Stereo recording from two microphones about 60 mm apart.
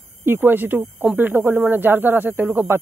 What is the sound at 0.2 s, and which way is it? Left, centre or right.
Speech, right.